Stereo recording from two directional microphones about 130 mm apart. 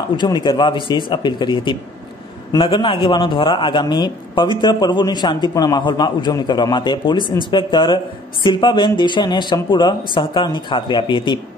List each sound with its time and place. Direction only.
0.2 s a man's voice: 35° left (ahead or behind)